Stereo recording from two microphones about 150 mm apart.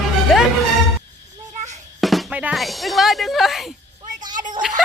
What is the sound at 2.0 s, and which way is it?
Speech, centre (ahead or behind).